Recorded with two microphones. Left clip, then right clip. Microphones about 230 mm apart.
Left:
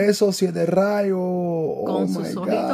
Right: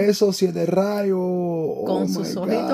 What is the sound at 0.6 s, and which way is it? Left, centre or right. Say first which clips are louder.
Speech: left 2 dB; left.